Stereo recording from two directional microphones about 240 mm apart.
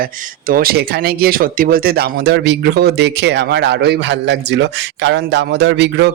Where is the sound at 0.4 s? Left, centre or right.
Right.